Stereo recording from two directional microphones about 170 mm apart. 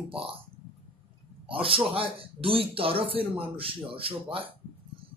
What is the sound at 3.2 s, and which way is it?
Speech, 10° right (ahead or behind).